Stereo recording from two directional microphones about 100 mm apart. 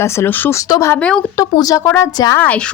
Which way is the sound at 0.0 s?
25° left (ahead or behind).